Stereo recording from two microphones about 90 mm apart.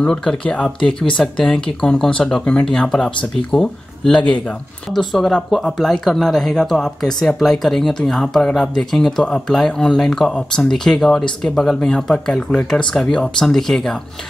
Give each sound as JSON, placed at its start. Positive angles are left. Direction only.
{"t": 0.0, "sound": "speech", "side_deg": 10}